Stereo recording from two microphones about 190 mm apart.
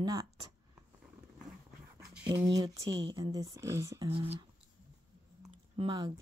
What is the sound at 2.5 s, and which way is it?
Speech, 20° right (ahead or behind).